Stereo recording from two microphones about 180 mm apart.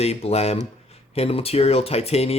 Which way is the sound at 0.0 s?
35° left (ahead or behind).